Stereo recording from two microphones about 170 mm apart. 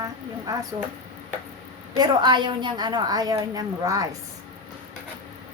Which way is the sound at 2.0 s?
25° right (ahead or behind).